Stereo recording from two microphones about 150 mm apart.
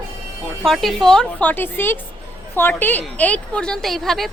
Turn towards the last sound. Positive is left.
turn(degrees=0)  # may be behind; listen again after turning